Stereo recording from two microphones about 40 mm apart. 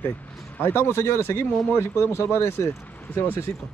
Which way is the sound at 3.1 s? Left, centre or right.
Left.